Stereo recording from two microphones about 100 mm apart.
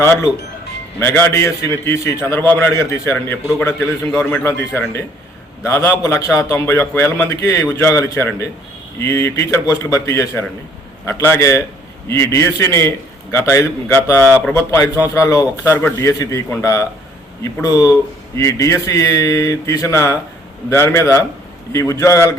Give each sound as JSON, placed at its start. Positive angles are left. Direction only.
{"t": 0.0, "sound": "a man's voice", "side_deg": 30}
{"t": 11.3, "sound": "a man's voice", "side_deg": 30}